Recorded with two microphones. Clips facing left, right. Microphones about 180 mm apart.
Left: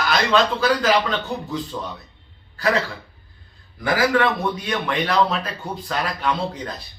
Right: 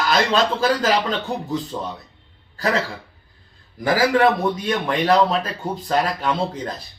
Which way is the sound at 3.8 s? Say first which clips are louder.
Right 2 dB; 35° right (ahead or behind).